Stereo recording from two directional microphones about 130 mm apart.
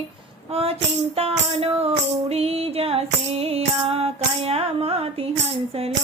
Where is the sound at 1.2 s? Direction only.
50° right (ahead or behind).